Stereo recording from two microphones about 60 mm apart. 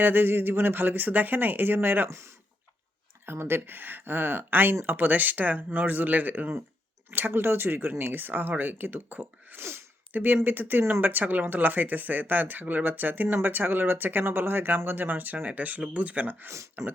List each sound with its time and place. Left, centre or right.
0.0 s speech: right
2.0 s speech: right
3.2 s speech: right
16.5 s speech: right